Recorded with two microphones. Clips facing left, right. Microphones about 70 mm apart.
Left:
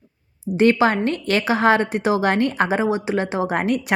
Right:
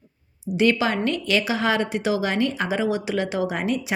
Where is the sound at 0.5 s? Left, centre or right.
Left.